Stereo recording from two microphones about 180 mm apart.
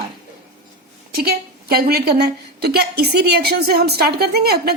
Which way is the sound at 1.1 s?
60° right (ahead or behind).